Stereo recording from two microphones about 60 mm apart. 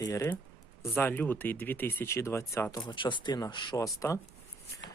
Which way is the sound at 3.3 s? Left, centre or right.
Left.